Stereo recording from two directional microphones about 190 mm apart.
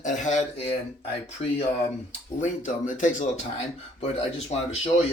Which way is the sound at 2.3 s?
40° left (ahead or behind).